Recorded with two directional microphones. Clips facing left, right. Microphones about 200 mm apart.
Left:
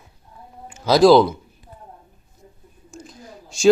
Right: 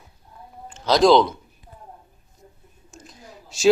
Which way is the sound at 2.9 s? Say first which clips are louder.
Left 5 dB; centre (ahead or behind).